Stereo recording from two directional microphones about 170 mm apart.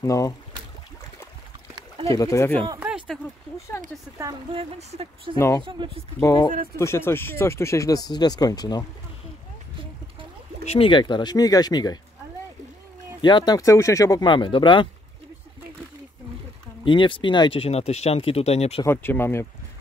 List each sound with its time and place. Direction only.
0.0 s speech: 20° left (ahead or behind)
2.0 s speech: 20° left (ahead or behind)
2.8 s a sound: 5° right (ahead or behind)
4.6 s speech: 35° right (ahead or behind)
6.2 s speech: 25° left (ahead or behind)
10.6 s speech: 35° left (ahead or behind)
13.2 s speech: 25° left (ahead or behind)
16.8 s speech: 30° left (ahead or behind)
18.9 s speech: 15° left (ahead or behind)